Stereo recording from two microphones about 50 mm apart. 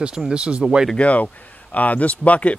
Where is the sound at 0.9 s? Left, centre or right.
Left.